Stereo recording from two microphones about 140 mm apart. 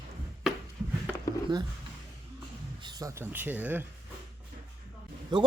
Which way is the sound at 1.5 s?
35° right (ahead or behind).